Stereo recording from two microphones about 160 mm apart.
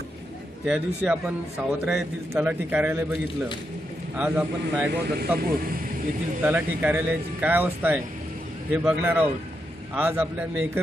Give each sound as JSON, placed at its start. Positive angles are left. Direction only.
{"t": 0.6, "sound": "a man's voice", "side_deg": -5}
{"t": 4.2, "sound": "a man's voice", "side_deg": -10}
{"t": 4.9, "sound": "speech", "side_deg": -80}
{"t": 5.4, "sound": "speech", "side_deg": -65}
{"t": 6.4, "sound": "a man's voice", "side_deg": -10}